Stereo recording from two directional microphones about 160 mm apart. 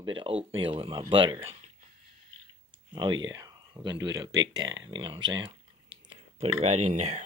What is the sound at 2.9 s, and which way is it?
Speech, 30° right (ahead or behind).